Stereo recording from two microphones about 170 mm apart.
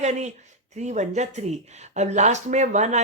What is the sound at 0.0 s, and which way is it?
Speech, 45° right (ahead or behind).